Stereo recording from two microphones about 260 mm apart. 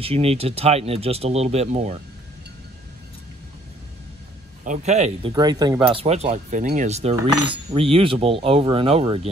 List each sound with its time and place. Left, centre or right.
0.0 s speech: right
4.6 s speech: right
5.3 s speech: centre
7.2 s cutlery: centre
7.7 s speech: right